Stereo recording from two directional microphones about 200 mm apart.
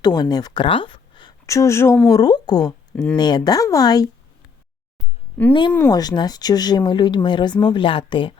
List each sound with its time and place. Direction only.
0.0 s speech: 20° left (ahead or behind)
2.9 s speech: 5° left (ahead or behind)
3.2 s speech: 20° left (ahead or behind)
5.4 s speech: 10° left (ahead or behind)
5.9 s speech: 20° left (ahead or behind)